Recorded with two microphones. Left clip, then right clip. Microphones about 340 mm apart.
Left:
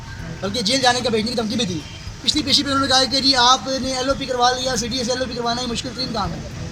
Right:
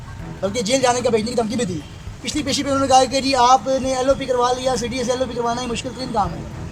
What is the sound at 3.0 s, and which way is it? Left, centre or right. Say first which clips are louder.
Speech: left 1 dB; centre.